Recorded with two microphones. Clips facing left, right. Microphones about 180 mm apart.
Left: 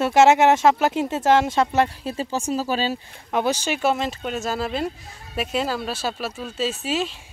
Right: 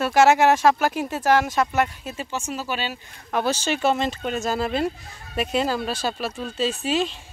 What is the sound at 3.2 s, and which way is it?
Speech, 15° left (ahead or behind).